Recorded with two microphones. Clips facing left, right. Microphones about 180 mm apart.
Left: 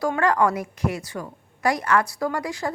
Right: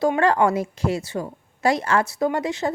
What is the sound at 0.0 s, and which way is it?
Speech, 25° right (ahead or behind).